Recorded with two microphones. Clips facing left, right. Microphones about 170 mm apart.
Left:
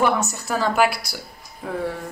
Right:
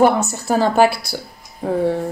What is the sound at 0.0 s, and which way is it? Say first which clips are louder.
Speech: right 6 dB; 30° right (ahead or behind).